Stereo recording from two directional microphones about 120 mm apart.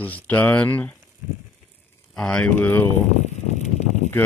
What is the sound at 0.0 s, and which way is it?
Speech, 15° left (ahead or behind).